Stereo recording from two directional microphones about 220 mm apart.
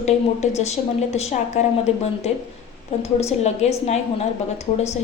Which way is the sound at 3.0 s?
30° left (ahead or behind).